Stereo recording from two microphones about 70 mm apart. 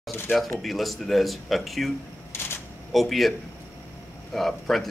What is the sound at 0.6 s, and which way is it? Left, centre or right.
Speech, centre.